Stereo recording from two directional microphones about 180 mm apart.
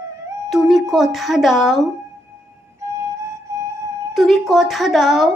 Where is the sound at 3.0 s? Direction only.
15° right (ahead or behind).